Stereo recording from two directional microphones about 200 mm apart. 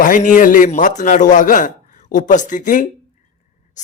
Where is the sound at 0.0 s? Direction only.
40° left (ahead or behind).